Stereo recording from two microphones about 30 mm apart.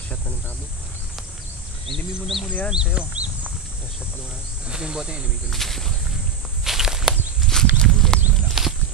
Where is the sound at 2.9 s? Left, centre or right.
Right.